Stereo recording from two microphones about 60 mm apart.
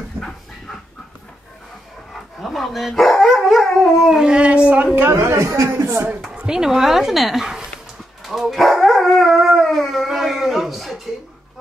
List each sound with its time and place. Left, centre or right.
0.2 s dog: right
2.4 s speech: centre
4.9 s speech: right
5.2 s speech: right
6.3 s speech: centre
8.2 s dog: centre